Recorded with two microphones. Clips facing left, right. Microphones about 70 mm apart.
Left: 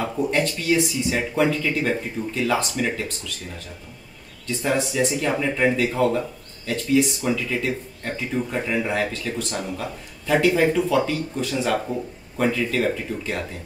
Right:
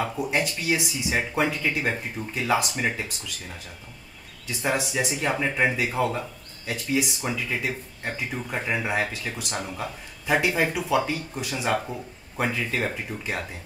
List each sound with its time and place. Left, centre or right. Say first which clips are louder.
0.0 s speech: left 3 dB; centre
4.6 s speech: left 4 dB; centre